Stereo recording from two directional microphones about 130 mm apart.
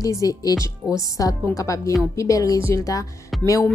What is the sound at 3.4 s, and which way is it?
Music, 25° left (ahead or behind).